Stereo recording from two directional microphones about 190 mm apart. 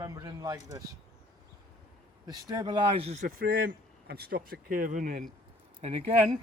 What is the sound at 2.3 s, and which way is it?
Speech, 20° right (ahead or behind).